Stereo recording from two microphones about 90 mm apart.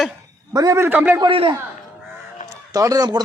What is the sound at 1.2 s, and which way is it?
Speech, 75° right (ahead or behind).